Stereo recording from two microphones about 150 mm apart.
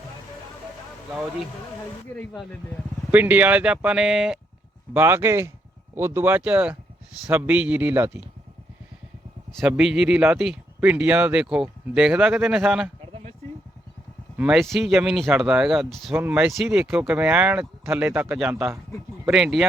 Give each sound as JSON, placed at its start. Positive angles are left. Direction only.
{"t": 2.3, "sound": "speech", "side_deg": 0}
{"t": 3.1, "sound": "speech", "side_deg": -10}
{"t": 4.9, "sound": "speech", "side_deg": -15}
{"t": 9.6, "sound": "speech", "side_deg": -5}
{"t": 14.3, "sound": "speech", "side_deg": -5}
{"t": 19.3, "sound": "speech", "side_deg": -5}